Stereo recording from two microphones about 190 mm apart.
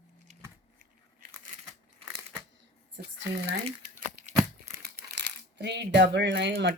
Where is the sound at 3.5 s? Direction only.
45° right (ahead or behind).